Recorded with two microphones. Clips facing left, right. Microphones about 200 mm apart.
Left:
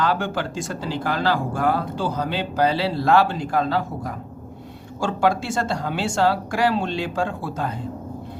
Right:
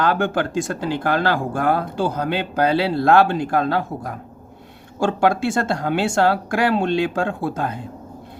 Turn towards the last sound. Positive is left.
turn(degrees=-55)  # may be behind; listen again after turning